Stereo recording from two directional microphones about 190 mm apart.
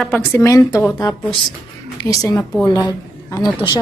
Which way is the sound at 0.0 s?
10° left (ahead or behind).